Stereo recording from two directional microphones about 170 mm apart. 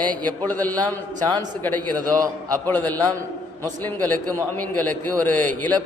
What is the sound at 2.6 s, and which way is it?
A man's voice, 10° left (ahead or behind).